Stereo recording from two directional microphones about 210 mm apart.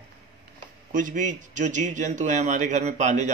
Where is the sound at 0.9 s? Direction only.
40° right (ahead or behind).